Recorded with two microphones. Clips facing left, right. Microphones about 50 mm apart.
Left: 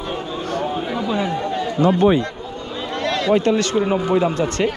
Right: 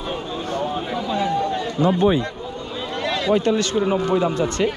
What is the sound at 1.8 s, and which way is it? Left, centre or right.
Speech, left.